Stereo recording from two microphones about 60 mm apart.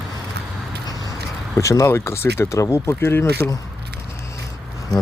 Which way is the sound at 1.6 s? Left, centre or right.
Left.